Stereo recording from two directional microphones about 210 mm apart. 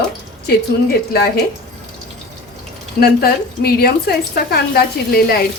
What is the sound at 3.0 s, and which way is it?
A woman's voice, 45° left (ahead or behind).